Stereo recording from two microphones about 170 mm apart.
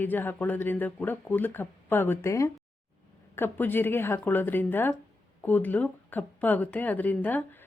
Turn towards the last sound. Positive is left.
turn(degrees=10)  # may be behind; listen again after turning